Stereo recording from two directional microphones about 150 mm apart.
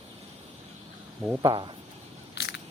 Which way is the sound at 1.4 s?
30° right (ahead or behind).